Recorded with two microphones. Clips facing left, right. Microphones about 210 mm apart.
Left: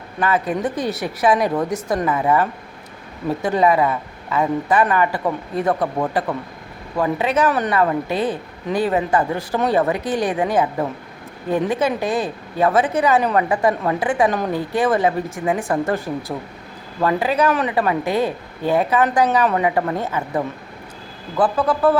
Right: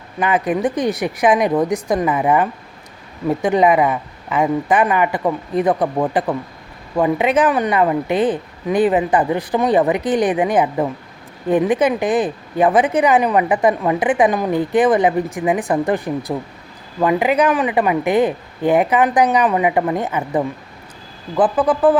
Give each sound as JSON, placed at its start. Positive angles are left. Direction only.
{"t": 0.2, "sound": "speech", "side_deg": -20}